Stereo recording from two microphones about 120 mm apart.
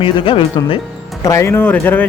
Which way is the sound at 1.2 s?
25° left (ahead or behind).